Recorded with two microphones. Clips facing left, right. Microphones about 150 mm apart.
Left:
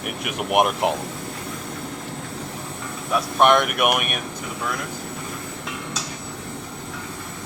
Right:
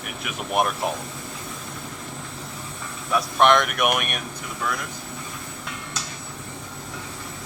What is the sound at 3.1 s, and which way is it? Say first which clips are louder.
Speech: left 1 dB; 5° left (ahead or behind).